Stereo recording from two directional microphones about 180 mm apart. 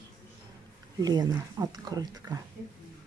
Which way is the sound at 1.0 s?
20° right (ahead or behind).